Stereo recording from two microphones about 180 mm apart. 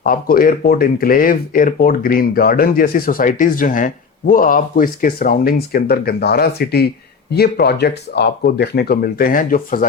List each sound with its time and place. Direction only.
0.0 s speech: 50° left (ahead or behind)